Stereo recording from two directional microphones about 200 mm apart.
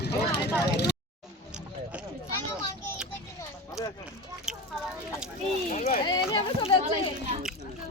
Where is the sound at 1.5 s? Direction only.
5° right (ahead or behind).